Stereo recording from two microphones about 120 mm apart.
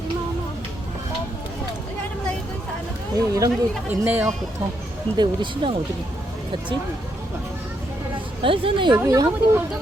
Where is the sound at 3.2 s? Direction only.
30° right (ahead or behind).